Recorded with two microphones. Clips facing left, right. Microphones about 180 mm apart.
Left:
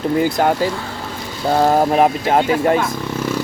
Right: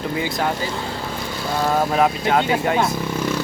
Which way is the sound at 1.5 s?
40° left (ahead or behind).